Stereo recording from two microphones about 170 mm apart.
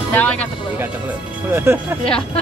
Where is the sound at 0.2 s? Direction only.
10° left (ahead or behind).